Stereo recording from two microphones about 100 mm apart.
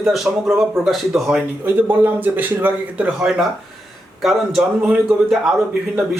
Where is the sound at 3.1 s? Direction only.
5° right (ahead or behind).